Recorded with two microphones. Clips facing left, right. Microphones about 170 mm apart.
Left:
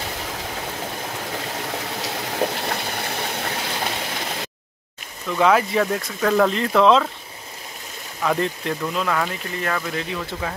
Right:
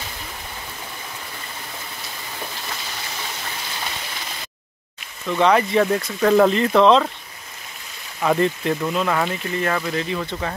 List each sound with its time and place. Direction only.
0.0 s a sound: 85° left; by 4.5 s 60° left (ahead or behind)
5.3 s speech: centre (ahead or behind)
8.2 s speech: 5° right (ahead or behind)